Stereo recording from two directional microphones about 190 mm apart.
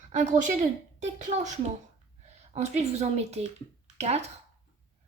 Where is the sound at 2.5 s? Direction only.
35° right (ahead or behind).